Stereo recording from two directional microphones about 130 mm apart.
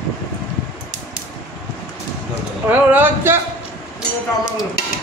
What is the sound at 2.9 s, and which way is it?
Speech, 15° right (ahead or behind).